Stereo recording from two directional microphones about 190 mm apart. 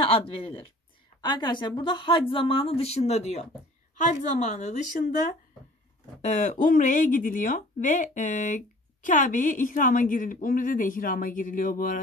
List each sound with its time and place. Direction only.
0.0 s a woman's voice: 30° left (ahead or behind)
6.2 s speech: 40° left (ahead or behind)